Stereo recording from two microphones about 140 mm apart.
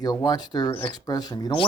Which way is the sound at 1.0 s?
25° left (ahead or behind).